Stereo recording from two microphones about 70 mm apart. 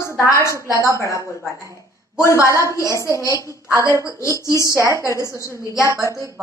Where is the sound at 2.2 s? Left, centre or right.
Left.